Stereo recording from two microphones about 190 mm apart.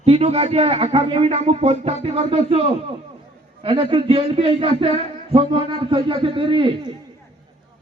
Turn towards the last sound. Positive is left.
turn(degrees=-25)  # may be behind; listen again after turning